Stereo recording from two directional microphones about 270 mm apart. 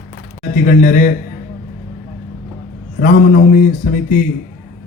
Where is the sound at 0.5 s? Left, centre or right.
Left.